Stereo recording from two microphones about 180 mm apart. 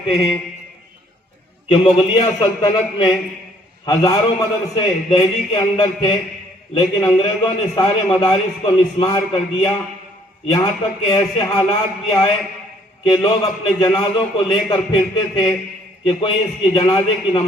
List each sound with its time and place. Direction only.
1.6 s a man's voice: 30° left (ahead or behind)
16.7 s a man's voice: 25° left (ahead or behind)